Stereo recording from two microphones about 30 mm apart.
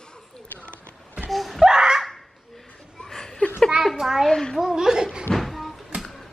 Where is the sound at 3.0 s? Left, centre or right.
Centre.